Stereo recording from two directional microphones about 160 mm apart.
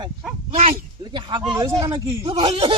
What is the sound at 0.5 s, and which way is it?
Speech, 50° right (ahead or behind).